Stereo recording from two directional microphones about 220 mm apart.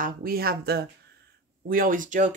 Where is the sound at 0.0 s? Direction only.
40° right (ahead or behind).